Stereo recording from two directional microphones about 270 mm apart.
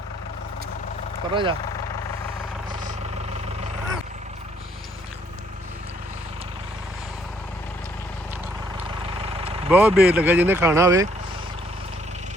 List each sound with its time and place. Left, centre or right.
1.3 s speech: centre
8.9 s vehicle: centre
9.6 s speech: centre